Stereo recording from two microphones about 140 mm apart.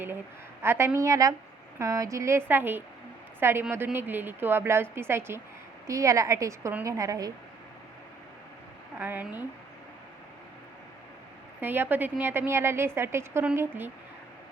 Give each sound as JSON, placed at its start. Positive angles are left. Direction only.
{"t": 0.6, "sound": "a woman's voice", "side_deg": -15}
{"t": 9.0, "sound": "a woman's voice", "side_deg": -15}
{"t": 11.6, "sound": "a woman's voice", "side_deg": -15}